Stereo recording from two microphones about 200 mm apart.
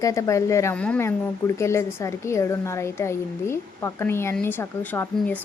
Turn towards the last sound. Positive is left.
turn(degrees=5)  # may be behind; listen again after turning